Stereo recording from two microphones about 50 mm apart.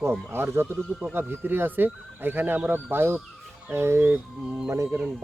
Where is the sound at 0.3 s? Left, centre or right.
Right.